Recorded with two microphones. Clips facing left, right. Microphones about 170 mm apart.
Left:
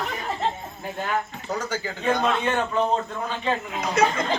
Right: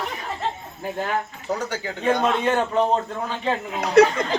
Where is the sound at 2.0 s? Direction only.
30° right (ahead or behind).